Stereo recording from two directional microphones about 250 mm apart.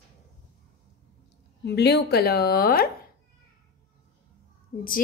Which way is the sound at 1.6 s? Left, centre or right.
Left.